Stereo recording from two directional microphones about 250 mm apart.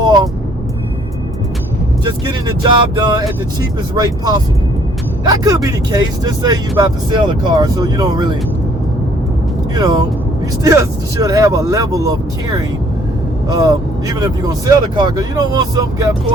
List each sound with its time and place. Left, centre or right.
2.0 s speech: centre
9.7 s speech: centre